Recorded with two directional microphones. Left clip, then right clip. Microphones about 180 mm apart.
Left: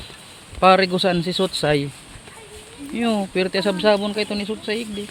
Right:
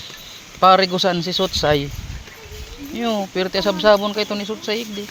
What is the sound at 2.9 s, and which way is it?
Speech, 30° left (ahead or behind).